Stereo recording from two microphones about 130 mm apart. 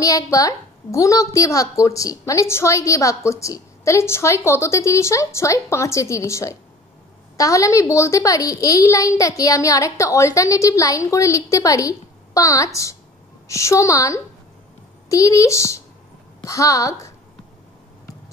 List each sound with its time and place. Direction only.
0.0 s a woman's voice: 25° left (ahead or behind)